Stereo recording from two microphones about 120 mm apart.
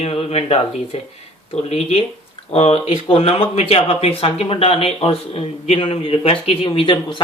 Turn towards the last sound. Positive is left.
turn(degrees=40)  # may be behind; listen again after turning